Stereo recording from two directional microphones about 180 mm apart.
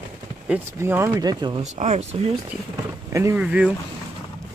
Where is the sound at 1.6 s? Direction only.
40° right (ahead or behind).